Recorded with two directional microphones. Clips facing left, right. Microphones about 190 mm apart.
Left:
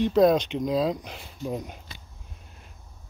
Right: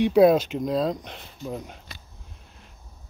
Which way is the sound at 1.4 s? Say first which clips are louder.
Left 2 dB; 15° left (ahead or behind).